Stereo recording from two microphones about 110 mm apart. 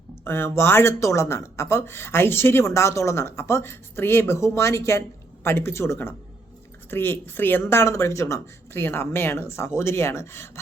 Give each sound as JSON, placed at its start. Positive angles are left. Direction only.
{"t": 0.3, "sound": "speech", "side_deg": 20}